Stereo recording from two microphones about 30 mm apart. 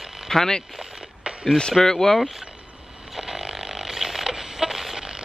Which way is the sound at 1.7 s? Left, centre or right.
Centre.